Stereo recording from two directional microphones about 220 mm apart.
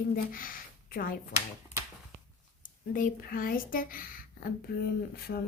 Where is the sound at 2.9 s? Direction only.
40° left (ahead or behind).